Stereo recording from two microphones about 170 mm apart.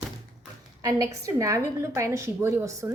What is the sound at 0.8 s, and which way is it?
A woman's voice, 20° right (ahead or behind).